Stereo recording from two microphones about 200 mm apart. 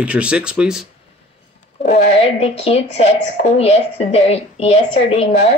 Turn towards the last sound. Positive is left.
turn(degrees=35)  # may be behind; listen again after turning